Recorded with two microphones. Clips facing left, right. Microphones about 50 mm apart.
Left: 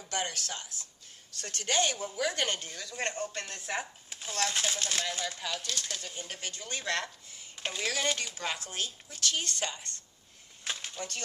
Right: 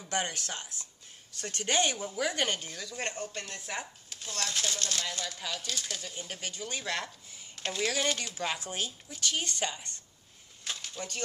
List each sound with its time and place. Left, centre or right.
0.1 s speech: right
2.0 s a woman's voice: centre
4.1 s speech: centre
5.4 s a man's voice: centre
7.5 s speech: centre
7.9 s a man's voice: centre
8.5 s a woman's voice: centre
11.0 s a woman's voice: centre